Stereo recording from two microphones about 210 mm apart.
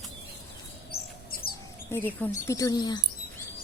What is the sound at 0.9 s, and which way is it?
Bird, 45° left (ahead or behind).